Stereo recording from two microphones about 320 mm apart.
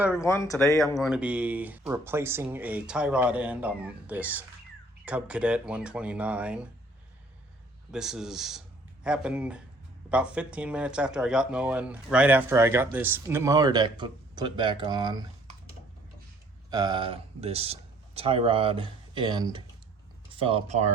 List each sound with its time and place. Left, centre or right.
0.2 s speech: centre
7.9 s speech: centre
16.6 s speech: centre